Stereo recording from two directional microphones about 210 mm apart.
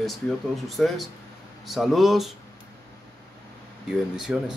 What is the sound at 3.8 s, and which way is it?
Speech, 5° right (ahead or behind).